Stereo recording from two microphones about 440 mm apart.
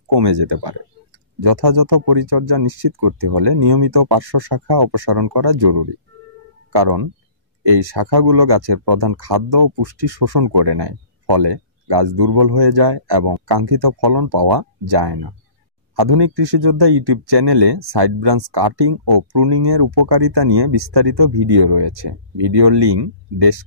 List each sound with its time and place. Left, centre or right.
0.1 s speech: right